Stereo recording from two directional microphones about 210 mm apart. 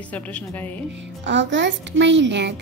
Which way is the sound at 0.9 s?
60° right (ahead or behind).